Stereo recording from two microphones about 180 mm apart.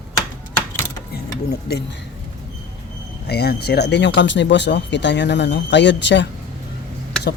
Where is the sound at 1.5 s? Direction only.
65° left (ahead or behind).